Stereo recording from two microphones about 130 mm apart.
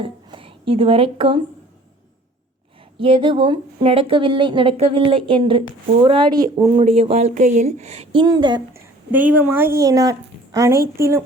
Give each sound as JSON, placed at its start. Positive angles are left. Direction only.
{"t": 0.0, "sound": "speech", "side_deg": -40}
{"t": 3.0, "sound": "a woman's voice", "side_deg": -40}
{"t": 6.8, "sound": "speech", "side_deg": -50}
{"t": 8.2, "sound": "a woman's voice", "side_deg": -35}
{"t": 8.7, "sound": "speech", "side_deg": -10}